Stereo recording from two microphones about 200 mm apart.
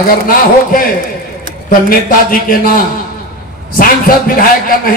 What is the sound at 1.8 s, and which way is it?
A man's voice, 45° left (ahead or behind).